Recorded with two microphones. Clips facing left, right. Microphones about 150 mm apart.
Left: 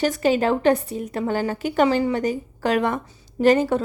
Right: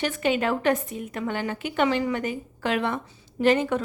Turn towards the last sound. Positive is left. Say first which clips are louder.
# left 4 dB
turn(degrees=40)  # may be behind; listen again after turning